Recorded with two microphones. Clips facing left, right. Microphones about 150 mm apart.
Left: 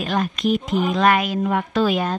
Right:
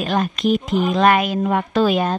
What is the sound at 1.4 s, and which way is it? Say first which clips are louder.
Speech: right 2 dB; 35° right (ahead or behind).